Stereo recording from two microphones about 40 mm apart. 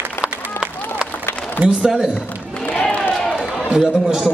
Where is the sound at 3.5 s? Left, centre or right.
Centre.